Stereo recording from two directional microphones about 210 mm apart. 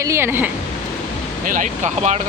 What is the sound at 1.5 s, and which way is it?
Speech, 40° right (ahead or behind).